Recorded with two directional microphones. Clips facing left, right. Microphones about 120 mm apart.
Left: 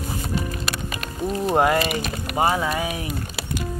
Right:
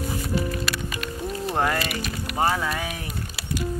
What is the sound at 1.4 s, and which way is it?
Speech, 20° left (ahead or behind).